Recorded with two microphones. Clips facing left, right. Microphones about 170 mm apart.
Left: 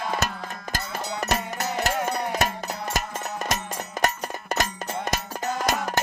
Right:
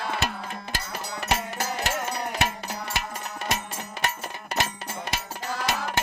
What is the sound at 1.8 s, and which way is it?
Music, 45° left (ahead or behind).